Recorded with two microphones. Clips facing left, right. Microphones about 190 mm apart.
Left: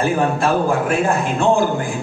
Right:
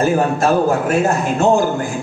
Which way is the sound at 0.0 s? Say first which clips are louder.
Right 2 dB; 40° right (ahead or behind).